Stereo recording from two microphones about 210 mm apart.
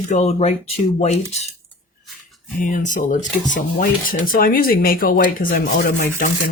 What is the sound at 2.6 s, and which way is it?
Speech, 40° left (ahead or behind).